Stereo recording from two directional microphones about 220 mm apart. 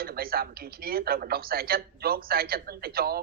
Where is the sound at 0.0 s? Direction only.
45° right (ahead or behind).